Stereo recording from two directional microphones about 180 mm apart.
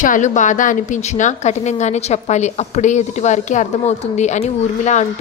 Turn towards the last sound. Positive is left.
turn(degrees=40)  # may be behind; listen again after turning